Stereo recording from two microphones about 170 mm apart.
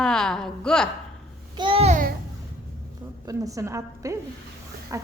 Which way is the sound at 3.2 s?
20° right (ahead or behind).